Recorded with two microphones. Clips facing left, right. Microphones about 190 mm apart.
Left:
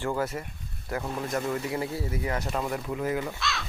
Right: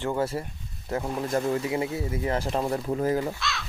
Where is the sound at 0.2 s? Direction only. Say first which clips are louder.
Right 3 dB; 30° right (ahead or behind).